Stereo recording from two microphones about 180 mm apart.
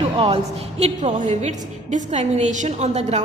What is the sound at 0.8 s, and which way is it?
A woman's voice, 40° right (ahead or behind).